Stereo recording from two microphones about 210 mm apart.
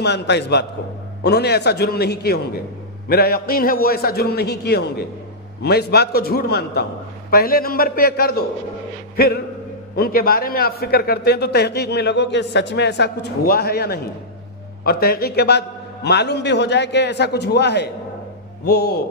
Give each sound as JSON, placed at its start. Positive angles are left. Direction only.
{"t": 0.0, "sound": "a man's voice", "side_deg": 55}
{"t": 9.1, "sound": "music", "side_deg": 45}
{"t": 9.9, "sound": "a man's voice", "side_deg": 45}